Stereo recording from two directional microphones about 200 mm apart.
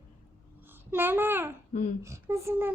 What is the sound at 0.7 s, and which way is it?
A child's voice, 10° right (ahead or behind).